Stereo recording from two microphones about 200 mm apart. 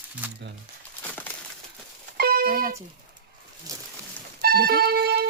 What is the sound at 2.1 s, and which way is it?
Music, 50° right (ahead or behind).